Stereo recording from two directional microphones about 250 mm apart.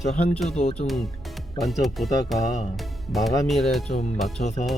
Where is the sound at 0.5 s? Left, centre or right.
Left.